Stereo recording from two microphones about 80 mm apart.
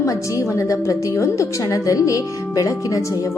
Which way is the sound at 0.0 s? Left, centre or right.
Left.